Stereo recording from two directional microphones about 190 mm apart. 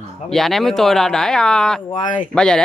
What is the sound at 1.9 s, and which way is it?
Speech, 25° left (ahead or behind).